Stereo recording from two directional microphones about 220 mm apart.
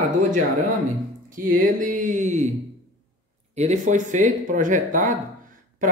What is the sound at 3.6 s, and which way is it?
Speech, 35° right (ahead or behind).